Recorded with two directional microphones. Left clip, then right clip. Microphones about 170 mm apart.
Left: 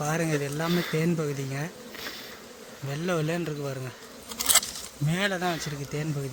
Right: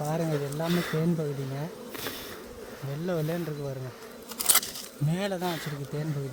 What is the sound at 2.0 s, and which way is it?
Bee, 55° right (ahead or behind).